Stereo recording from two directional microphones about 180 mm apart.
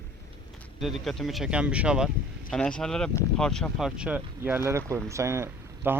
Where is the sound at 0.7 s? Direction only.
Centre (ahead or behind).